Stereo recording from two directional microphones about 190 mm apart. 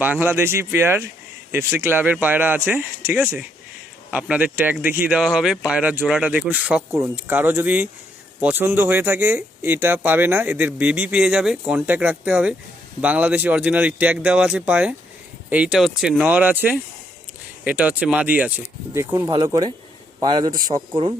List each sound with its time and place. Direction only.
0.0 s a man's voice: 10° right (ahead or behind)